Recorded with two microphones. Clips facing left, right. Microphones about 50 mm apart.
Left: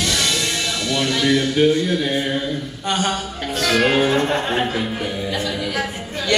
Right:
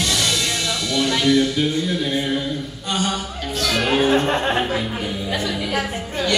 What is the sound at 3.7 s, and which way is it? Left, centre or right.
Speech, left.